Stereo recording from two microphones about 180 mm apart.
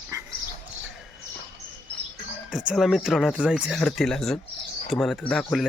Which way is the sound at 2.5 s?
Centre (ahead or behind).